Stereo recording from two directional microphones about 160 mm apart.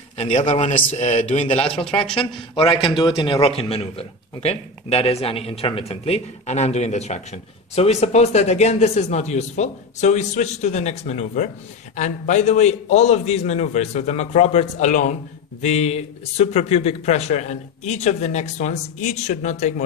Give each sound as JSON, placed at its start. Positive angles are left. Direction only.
{"t": 0.2, "sound": "speech", "side_deg": 45}
{"t": 2.0, "sound": "a man's voice", "side_deg": 35}